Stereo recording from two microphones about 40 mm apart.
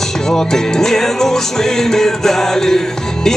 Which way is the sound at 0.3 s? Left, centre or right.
Centre.